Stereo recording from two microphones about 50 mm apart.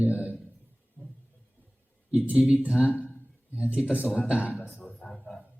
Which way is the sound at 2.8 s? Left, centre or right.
Left.